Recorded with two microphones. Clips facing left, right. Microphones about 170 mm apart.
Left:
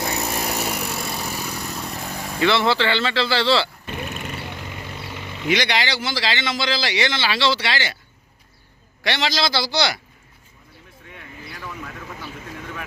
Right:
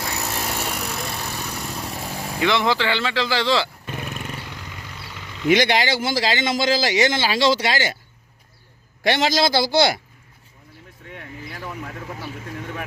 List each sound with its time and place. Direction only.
0.0 s power tool: 15° left (ahead or behind)
0.4 s vehicle: 5° left (ahead or behind); by 3.7 s 15° right (ahead or behind)
4.4 s vehicle: 20° left (ahead or behind)
5.5 s speech: 50° right (ahead or behind)
9.0 s speech: 50° right (ahead or behind)